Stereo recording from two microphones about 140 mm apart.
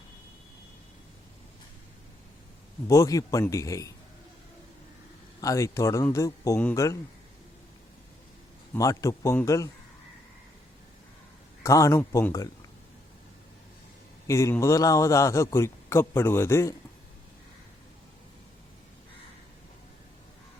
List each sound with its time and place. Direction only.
2.8 s speech: 25° left (ahead or behind)
5.4 s speech: 25° left (ahead or behind)
8.7 s speech: 25° left (ahead or behind)
11.6 s speech: 20° left (ahead or behind)
14.3 s speech: 20° left (ahead or behind)